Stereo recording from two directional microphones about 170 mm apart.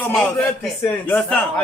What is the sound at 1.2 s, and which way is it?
Speech, 5° left (ahead or behind).